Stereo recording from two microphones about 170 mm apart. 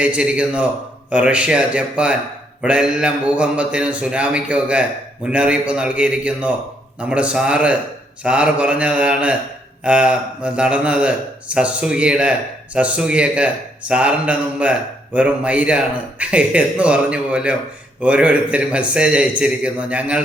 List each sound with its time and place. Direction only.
0.0 s speech: 5° right (ahead or behind)